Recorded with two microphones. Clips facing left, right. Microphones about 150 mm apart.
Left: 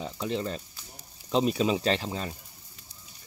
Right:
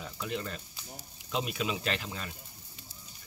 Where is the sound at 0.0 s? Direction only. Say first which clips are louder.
Left 6 dB; 30° left (ahead or behind).